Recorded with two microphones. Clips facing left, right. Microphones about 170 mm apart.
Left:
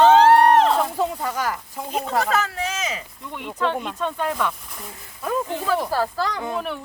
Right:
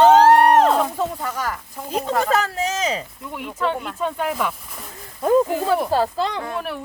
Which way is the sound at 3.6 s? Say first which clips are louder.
Even; 5° right (ahead or behind).